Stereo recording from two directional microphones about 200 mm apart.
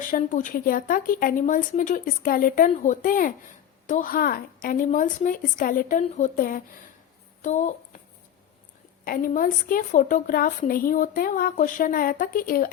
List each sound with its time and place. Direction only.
0.1 s a woman's voice: 40° left (ahead or behind)
9.0 s a woman's voice: 45° left (ahead or behind)